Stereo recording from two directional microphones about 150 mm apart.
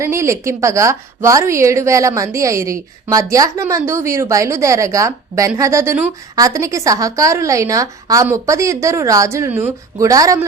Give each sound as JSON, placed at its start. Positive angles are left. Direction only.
{"t": 0.0, "sound": "a woman's voice", "side_deg": -20}